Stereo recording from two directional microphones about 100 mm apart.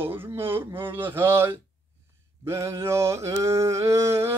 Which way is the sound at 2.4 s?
30° right (ahead or behind).